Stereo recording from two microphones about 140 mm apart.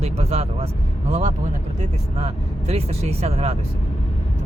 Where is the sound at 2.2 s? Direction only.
45° right (ahead or behind).